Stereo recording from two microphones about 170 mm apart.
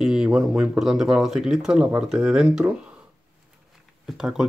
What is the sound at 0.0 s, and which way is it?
Speech, 5° right (ahead or behind).